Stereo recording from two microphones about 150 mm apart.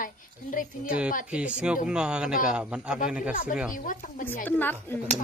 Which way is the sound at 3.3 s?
65° left (ahead or behind).